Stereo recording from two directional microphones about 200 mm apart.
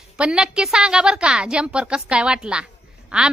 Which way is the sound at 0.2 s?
5° right (ahead or behind).